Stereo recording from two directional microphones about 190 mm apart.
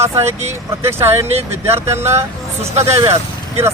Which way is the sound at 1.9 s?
15° right (ahead or behind).